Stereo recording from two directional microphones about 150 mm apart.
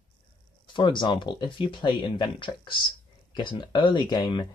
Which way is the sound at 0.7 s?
30° left (ahead or behind).